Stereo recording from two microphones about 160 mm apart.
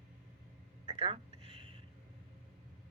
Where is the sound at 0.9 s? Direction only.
35° right (ahead or behind).